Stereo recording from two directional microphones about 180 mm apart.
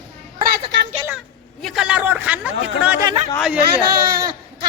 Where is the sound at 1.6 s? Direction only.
5° right (ahead or behind).